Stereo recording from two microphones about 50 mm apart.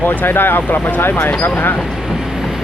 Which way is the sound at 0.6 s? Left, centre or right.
Left.